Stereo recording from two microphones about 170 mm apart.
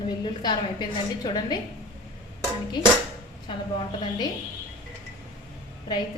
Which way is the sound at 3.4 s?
25° left (ahead or behind).